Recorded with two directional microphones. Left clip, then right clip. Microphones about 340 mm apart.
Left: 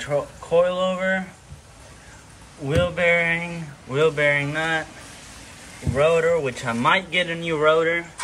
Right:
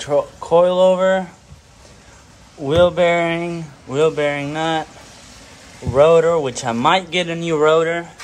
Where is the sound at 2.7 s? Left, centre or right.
Right.